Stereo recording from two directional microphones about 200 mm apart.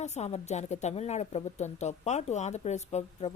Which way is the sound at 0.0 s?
35° left (ahead or behind).